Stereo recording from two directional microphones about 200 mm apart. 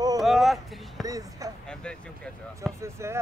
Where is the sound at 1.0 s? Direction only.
15° right (ahead or behind).